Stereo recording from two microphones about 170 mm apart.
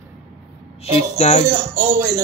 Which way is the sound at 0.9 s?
40° left (ahead or behind).